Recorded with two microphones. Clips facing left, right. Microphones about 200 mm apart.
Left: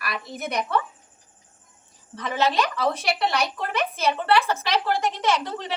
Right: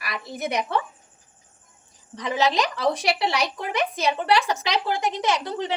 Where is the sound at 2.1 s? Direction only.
15° right (ahead or behind).